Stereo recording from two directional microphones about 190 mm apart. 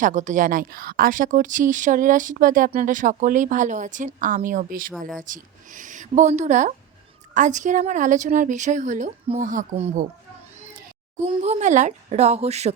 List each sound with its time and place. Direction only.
0.0 s speech: 40° right (ahead or behind)
11.4 s speech: 35° right (ahead or behind)